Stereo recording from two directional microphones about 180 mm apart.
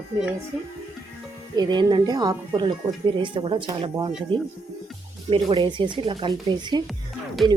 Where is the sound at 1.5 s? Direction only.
25° right (ahead or behind).